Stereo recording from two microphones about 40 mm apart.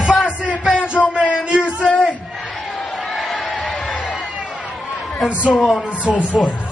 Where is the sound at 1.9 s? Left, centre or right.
Left.